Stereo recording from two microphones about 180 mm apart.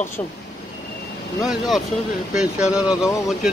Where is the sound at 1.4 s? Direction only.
Centre (ahead or behind).